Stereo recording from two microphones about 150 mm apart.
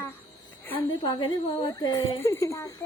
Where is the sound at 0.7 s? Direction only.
30° left (ahead or behind).